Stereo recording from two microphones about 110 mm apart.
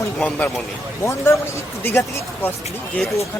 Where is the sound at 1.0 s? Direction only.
25° left (ahead or behind).